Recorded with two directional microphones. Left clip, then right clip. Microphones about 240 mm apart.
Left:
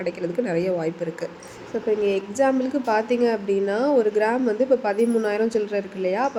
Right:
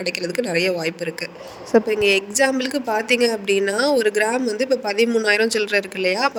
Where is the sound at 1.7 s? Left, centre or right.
Right.